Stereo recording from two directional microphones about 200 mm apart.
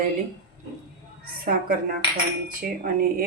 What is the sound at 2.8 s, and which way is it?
Speech, 45° right (ahead or behind).